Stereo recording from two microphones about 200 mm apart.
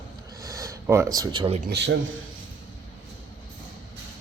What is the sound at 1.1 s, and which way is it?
Speech, 20° right (ahead or behind).